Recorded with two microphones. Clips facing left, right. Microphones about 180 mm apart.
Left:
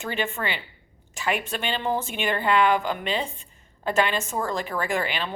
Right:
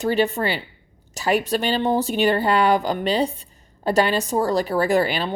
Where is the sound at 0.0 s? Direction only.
35° right (ahead or behind).